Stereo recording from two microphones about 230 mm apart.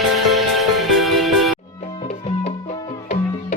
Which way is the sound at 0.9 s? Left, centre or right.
Centre.